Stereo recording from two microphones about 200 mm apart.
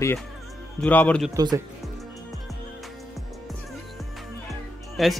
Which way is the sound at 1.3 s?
20° right (ahead or behind).